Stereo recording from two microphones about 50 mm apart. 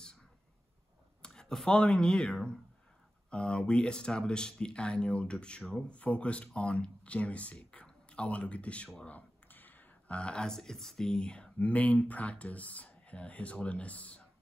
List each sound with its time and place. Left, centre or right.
1.2 s speech: centre
9.5 s a sound: left
10.0 s speech: left
11.5 s speech: left